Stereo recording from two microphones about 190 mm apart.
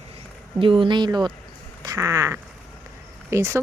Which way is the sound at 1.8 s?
15° right (ahead or behind).